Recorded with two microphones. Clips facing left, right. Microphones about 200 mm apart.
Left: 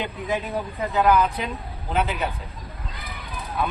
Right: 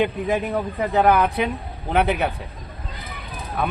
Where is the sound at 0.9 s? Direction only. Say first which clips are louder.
Right 2 dB; 60° right (ahead or behind).